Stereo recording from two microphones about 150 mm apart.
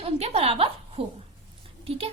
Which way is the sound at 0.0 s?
40° right (ahead or behind).